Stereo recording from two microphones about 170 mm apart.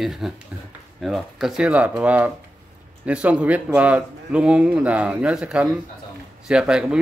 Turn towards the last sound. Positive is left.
turn(degrees=-5)  # may be behind; listen again after turning